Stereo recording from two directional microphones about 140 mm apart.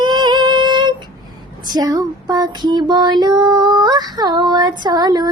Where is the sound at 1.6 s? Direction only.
30° right (ahead or behind).